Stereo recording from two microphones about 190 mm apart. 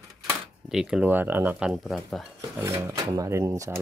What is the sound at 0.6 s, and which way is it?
Speech, 5° right (ahead or behind).